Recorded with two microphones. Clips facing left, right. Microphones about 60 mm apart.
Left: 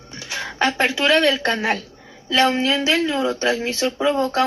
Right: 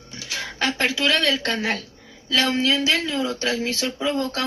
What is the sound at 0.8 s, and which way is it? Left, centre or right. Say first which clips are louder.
Speech: left 4 dB; left.